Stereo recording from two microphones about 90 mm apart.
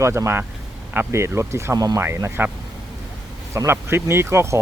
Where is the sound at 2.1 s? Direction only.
25° right (ahead or behind).